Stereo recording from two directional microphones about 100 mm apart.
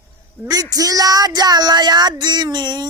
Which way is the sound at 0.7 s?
35° right (ahead or behind).